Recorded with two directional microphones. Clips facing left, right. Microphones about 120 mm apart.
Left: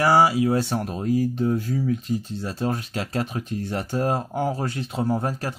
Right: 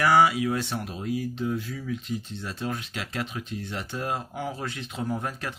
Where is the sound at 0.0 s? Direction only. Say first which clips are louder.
Left 3 dB; 35° left (ahead or behind).